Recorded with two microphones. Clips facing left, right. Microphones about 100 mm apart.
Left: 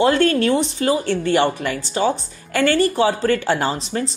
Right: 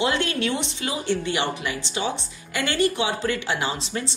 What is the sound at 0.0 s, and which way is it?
Speech, 45° left (ahead or behind).